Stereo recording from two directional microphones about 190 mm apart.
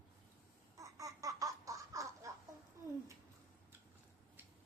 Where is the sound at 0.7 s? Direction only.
15° right (ahead or behind).